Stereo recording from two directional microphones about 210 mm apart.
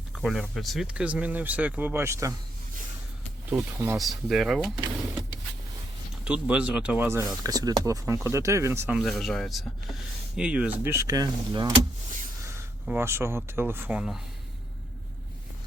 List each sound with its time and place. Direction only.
0.2 s speech: centre (ahead or behind)
3.5 s speech: 10° right (ahead or behind)
3.9 s speech: centre (ahead or behind)
4.7 s speech: 20° right (ahead or behind)
6.2 s speech: 5° right (ahead or behind)
9.0 s speech: centre (ahead or behind); by 11.8 s 20° right (ahead or behind)
12.9 s speech: 10° right (ahead or behind)